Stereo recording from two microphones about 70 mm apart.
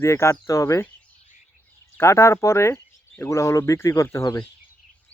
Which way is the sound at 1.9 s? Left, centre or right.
Left.